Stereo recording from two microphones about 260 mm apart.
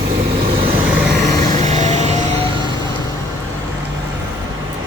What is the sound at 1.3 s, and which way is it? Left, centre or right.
Vehicle, centre.